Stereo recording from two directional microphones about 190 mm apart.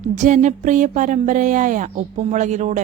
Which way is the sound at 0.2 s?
40° right (ahead or behind).